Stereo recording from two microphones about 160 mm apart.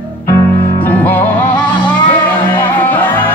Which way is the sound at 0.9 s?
10° left (ahead or behind).